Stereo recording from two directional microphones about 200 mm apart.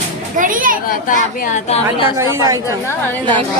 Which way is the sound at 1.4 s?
35° left (ahead or behind).